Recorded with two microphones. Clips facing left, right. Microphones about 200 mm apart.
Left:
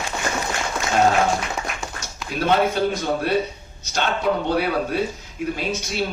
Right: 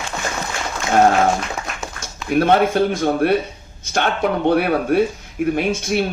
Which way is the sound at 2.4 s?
55° right (ahead or behind).